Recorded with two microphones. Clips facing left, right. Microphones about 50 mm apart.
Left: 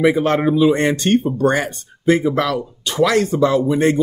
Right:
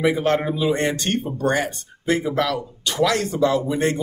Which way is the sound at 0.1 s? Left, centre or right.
Left.